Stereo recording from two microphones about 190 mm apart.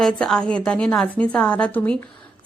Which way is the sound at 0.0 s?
5° left (ahead or behind).